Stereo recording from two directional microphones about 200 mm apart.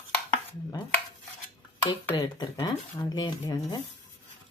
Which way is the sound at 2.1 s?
20° left (ahead or behind).